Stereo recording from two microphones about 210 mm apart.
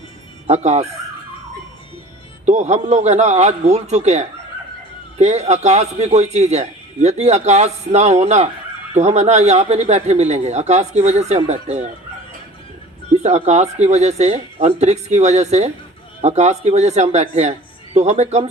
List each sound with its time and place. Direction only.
0.4 s a man's voice: 30° right (ahead or behind)
2.5 s a man's voice: 35° right (ahead or behind)
13.2 s a man's voice: 30° right (ahead or behind)